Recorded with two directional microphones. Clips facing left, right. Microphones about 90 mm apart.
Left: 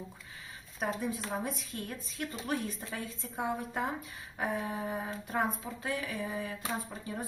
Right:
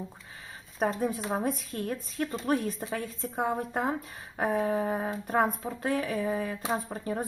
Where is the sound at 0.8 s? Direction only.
40° right (ahead or behind).